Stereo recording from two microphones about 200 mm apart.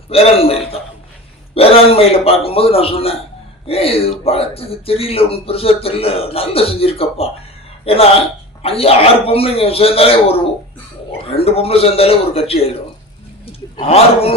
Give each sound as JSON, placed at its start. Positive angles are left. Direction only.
{"t": 0.1, "sound": "speech", "side_deg": 30}